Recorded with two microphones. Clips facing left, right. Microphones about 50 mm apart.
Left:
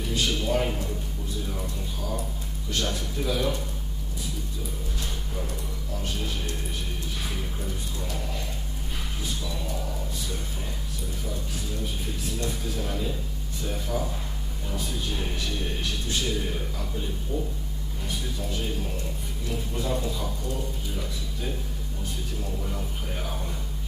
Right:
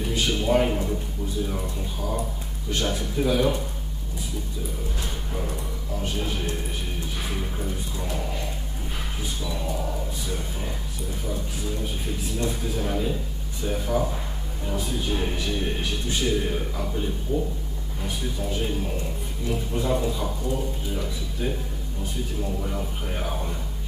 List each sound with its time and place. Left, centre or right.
0.0 s speech: centre
6.0 s speech: centre
7.6 s speech: centre
9.7 s speech: centre
12.4 s speech: centre